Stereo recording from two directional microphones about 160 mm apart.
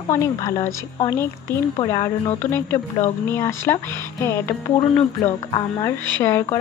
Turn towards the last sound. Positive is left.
turn(degrees=15)  # may be behind; listen again after turning